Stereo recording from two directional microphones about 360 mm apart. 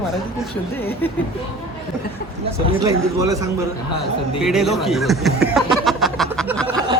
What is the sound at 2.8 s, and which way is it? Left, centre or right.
A woman's voice, centre.